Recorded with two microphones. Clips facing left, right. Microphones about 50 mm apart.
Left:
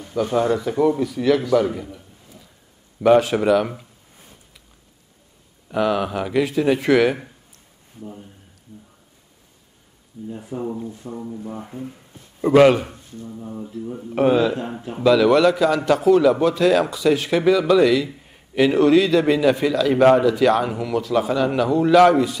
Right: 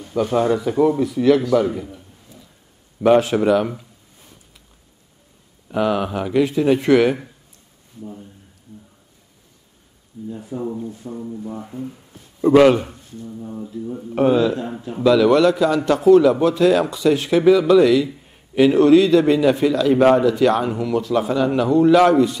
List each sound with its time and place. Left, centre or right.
0.1 s a man's voice: centre
1.5 s a sound: centre
3.0 s a man's voice: centre
5.7 s a man's voice: centre
10.3 s speech: left
10.6 s a man's voice: centre